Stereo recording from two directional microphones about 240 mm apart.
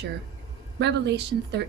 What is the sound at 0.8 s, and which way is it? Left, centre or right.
Speech, right.